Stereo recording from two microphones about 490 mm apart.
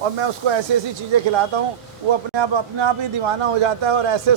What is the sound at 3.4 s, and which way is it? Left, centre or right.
Speech, right.